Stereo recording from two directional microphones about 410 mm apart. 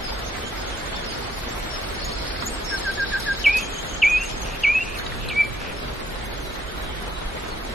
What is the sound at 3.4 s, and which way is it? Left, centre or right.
Bird vocalization, centre.